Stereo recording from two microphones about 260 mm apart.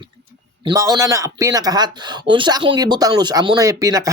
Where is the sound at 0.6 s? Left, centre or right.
Centre.